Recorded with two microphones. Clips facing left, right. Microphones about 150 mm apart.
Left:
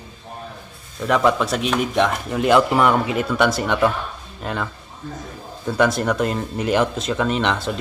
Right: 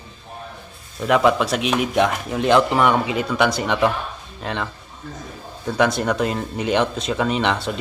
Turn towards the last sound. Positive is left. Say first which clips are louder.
# even
turn(degrees=0)  # may be behind; listen again after turning